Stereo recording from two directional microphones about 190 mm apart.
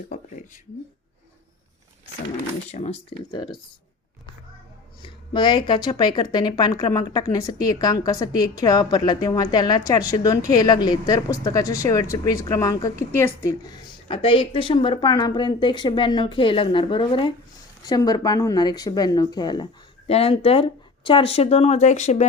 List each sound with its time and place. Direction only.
0.1 s a sound: 40° left (ahead or behind)
2.7 s speech: 35° left (ahead or behind)
3.3 s speech: 25° left (ahead or behind)
5.0 s speech: 25° left (ahead or behind)
14.1 s speech: 30° left (ahead or behind)